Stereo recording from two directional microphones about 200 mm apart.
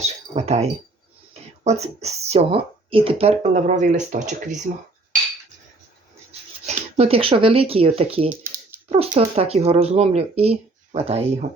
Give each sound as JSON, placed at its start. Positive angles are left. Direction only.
{"t": 0.3, "sound": "speech", "side_deg": -35}
{"t": 6.7, "sound": "speech", "side_deg": -30}